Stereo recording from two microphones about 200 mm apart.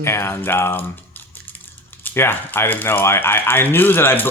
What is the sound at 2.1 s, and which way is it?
Speech, 10° left (ahead or behind).